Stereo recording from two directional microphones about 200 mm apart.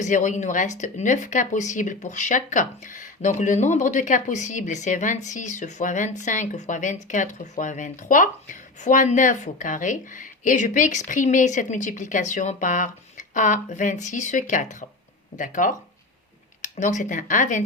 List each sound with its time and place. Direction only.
0.0 s speech: 40° left (ahead or behind)